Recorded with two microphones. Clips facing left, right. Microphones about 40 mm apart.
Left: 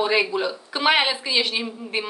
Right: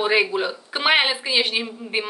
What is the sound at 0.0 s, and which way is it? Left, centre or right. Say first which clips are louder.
A woman's voice: right 1 dB; centre.